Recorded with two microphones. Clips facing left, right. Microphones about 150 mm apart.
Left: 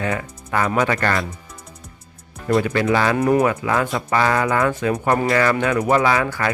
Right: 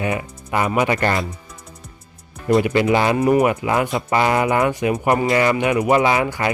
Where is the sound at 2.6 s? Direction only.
20° right (ahead or behind).